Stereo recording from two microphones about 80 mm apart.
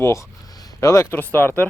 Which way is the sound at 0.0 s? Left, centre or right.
Left.